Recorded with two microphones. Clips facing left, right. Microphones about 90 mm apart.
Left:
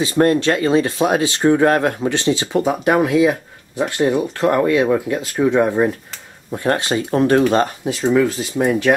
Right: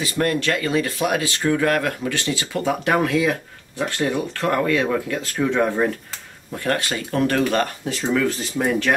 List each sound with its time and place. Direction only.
0.0 s speech: 30° left (ahead or behind)